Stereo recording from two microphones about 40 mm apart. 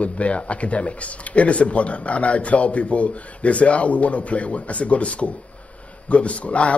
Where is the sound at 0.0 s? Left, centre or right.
Left.